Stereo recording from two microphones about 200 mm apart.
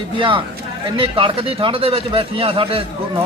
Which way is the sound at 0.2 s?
25° right (ahead or behind).